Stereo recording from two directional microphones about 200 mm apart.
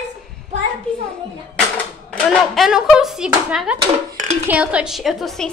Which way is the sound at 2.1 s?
Centre (ahead or behind).